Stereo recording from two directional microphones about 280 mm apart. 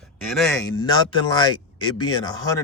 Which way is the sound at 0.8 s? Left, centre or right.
Centre.